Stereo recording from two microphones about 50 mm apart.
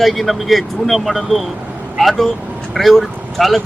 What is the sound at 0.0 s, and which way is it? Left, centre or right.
Speech, centre.